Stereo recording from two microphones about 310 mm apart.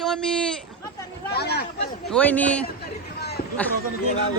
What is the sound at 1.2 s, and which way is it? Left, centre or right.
Speech, left.